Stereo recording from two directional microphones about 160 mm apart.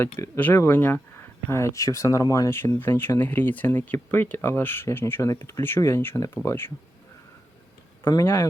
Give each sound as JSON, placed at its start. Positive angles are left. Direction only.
{"t": 0.0, "sound": "speech", "side_deg": 10}
{"t": 8.0, "sound": "speech", "side_deg": 15}